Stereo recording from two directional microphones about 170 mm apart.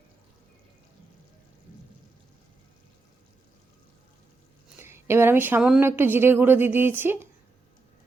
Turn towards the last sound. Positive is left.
turn(degrees=-10)  # may be behind; listen again after turning